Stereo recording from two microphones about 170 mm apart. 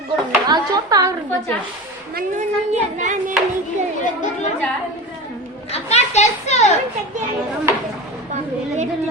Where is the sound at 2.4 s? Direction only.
45° right (ahead or behind).